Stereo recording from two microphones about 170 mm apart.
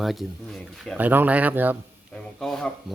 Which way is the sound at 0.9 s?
10° right (ahead or behind).